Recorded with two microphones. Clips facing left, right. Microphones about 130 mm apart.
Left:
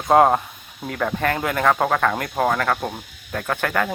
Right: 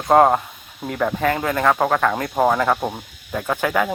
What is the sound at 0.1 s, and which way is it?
Speech, centre (ahead or behind).